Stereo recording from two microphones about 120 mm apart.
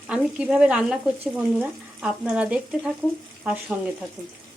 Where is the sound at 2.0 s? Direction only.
5° right (ahead or behind).